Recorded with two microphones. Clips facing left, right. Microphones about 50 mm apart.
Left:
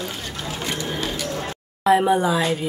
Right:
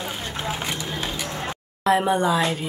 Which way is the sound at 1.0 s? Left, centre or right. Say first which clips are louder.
Left 2 dB; centre.